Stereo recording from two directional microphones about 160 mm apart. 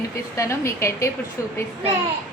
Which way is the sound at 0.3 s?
20° left (ahead or behind).